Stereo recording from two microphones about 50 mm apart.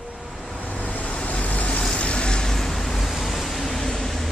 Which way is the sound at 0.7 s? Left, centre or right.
Left.